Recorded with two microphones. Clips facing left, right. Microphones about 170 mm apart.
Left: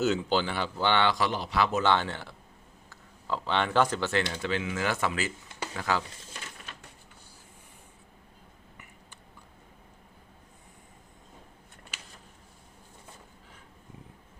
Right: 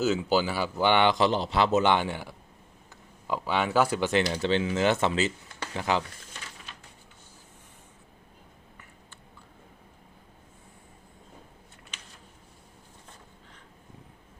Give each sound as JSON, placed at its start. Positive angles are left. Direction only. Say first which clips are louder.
{"t": 0.0, "sound": "speech", "louder": "right 2 dB", "side_deg": -5}